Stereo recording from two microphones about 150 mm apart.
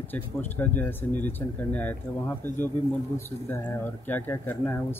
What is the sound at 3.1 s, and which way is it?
Speech, 15° left (ahead or behind).